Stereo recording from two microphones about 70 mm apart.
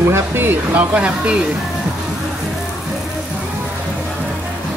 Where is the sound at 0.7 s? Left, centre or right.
Centre.